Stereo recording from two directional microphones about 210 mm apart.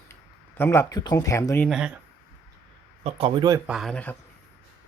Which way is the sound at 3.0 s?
25° right (ahead or behind).